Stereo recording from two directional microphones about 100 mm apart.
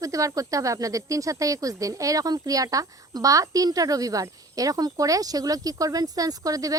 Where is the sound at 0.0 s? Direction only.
35° right (ahead or behind).